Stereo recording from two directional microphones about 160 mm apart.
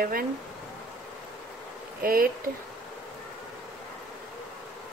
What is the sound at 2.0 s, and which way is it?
Speech, 65° right (ahead or behind).